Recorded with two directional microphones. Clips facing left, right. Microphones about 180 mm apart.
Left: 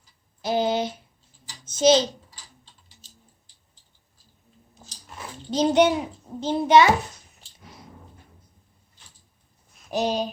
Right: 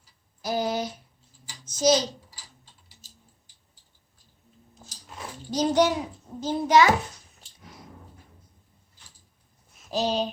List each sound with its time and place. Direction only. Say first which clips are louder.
0.4 s a sound: left 4 dB; 25° left (ahead or behind)
1.7 s a child's voice: left 4 dB; 25° left (ahead or behind)
5.5 s a child's voice: left 3 dB; 25° left (ahead or behind)
9.9 s speech: left 1 dB; 15° left (ahead or behind)